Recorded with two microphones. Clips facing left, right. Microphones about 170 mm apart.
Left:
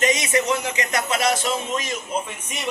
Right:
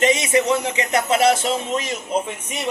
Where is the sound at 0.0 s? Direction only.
30° right (ahead or behind).